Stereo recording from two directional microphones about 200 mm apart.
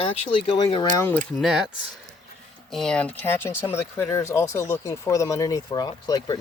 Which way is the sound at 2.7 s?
Centre (ahead or behind).